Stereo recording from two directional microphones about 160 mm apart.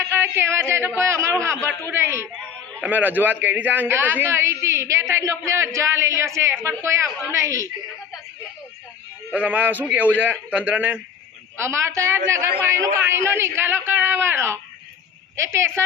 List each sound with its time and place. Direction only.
0.0 s a sound: 15° right (ahead or behind)
0.9 s a man's voice: 15° right (ahead or behind)
1.5 s a man's voice: 10° left (ahead or behind)
1.9 s a man's voice: 15° right (ahead or behind)
9.3 s a man's voice: 10° right (ahead or behind)